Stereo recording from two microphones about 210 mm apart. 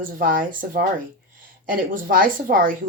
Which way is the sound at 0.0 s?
40° right (ahead or behind).